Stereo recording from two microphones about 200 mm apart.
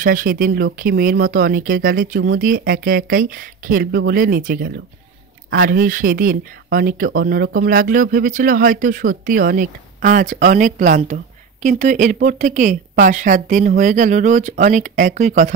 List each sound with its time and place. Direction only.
0.0 s speech: 45° right (ahead or behind)